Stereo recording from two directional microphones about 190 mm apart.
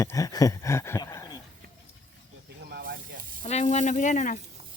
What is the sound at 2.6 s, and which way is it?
Snake, 55° right (ahead or behind).